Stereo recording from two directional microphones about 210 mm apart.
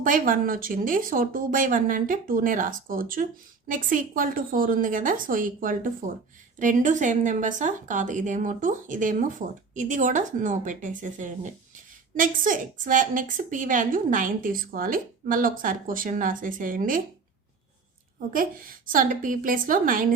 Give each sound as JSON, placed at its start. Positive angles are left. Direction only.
{"t": 0.0, "sound": "a woman's voice", "side_deg": -40}
{"t": 18.3, "sound": "a woman's voice", "side_deg": -40}